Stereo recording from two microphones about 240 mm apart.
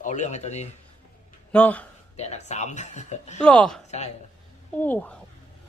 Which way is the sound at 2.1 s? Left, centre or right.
Left.